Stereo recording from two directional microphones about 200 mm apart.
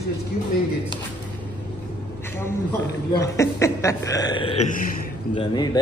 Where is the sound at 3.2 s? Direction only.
15° left (ahead or behind); by 4.7 s 30° left (ahead or behind).